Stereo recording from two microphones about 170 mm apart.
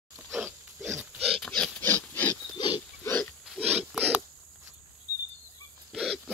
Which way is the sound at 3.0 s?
10° left (ahead or behind).